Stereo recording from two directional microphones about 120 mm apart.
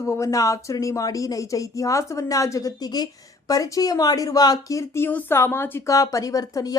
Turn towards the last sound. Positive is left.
turn(degrees=30)  # may be behind; listen again after turning